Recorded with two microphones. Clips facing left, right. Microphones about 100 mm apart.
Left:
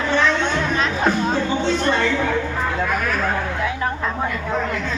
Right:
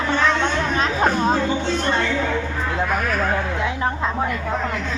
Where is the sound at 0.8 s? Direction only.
35° right (ahead or behind).